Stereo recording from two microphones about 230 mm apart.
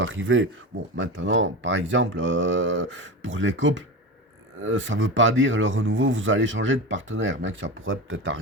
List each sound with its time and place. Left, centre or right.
0.0 s speech: right